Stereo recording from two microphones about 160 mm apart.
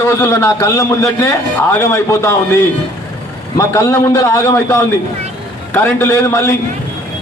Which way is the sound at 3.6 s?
20° left (ahead or behind).